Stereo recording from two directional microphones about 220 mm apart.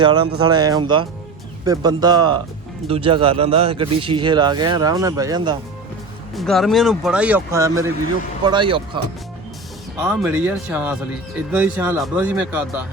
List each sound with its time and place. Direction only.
0.3 s speech: 20° right (ahead or behind)
6.3 s speech: centre (ahead or behind); by 8.8 s 20° right (ahead or behind)
10.0 s speech: 5° right (ahead or behind)